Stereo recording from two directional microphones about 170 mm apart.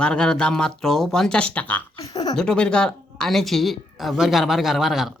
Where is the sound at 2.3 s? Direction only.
5° left (ahead or behind).